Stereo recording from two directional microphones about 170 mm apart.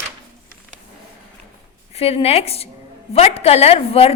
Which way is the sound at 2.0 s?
35° left (ahead or behind).